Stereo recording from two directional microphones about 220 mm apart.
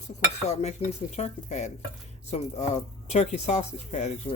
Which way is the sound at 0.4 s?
30° left (ahead or behind).